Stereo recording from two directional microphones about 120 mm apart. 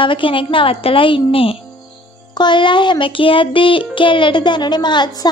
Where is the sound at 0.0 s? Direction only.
45° left (ahead or behind).